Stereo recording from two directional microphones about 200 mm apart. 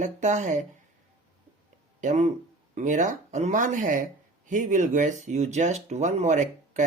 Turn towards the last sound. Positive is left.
turn(degrees=-35)  # may be behind; listen again after turning